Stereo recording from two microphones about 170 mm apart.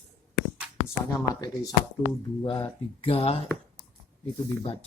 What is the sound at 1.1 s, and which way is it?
Speech, 20° left (ahead or behind).